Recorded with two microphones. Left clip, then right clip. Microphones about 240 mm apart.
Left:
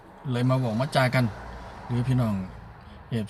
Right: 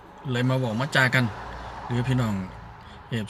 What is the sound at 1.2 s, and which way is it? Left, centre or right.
Speech, right.